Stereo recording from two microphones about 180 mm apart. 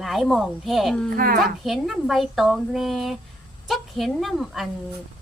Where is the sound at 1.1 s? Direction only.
50° right (ahead or behind).